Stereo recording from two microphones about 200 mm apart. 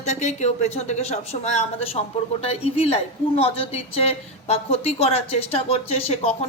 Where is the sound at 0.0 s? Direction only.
35° left (ahead or behind).